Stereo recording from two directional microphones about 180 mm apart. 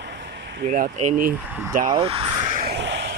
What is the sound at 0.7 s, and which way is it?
Speech, 50° right (ahead or behind).